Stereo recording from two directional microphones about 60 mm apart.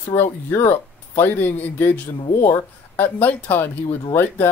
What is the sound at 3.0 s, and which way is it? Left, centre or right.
Speech, left.